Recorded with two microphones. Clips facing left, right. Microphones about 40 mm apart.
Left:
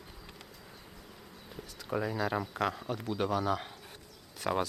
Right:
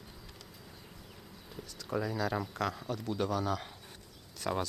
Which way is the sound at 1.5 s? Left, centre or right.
Centre.